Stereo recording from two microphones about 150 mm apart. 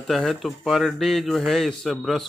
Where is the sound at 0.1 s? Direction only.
Centre (ahead or behind).